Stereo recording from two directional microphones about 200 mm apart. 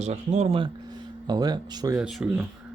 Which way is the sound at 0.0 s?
35° right (ahead or behind).